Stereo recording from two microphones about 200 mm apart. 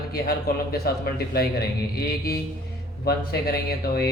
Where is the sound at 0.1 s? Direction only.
50° left (ahead or behind).